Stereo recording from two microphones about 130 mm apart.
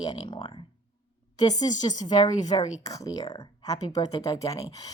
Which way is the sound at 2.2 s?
30° left (ahead or behind).